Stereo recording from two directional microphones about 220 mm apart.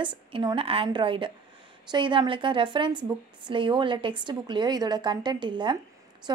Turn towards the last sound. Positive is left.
turn(degrees=-20)  # may be behind; listen again after turning